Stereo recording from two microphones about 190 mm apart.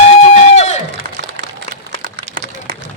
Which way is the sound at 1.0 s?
45° right (ahead or behind).